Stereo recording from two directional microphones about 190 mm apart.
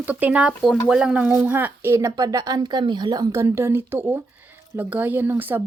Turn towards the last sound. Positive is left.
turn(degrees=-10)  # may be behind; listen again after turning